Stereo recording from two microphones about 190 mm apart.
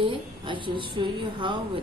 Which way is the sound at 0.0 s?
25° right (ahead or behind).